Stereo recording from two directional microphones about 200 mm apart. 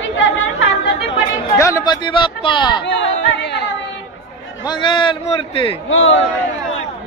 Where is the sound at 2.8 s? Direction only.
65° left (ahead or behind).